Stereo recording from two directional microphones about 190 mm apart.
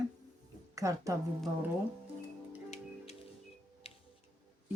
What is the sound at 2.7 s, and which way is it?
Music, 35° left (ahead or behind).